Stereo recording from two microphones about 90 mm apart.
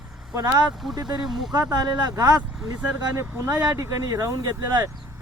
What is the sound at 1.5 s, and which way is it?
Speech, 50° right (ahead or behind).